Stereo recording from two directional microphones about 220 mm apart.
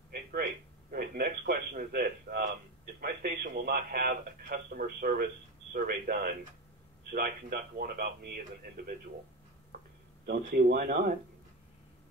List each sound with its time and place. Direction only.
0.1 s a sound: 40° right (ahead or behind)
0.9 s a man's voice: 40° right (ahead or behind)
10.2 s speech: 45° right (ahead or behind)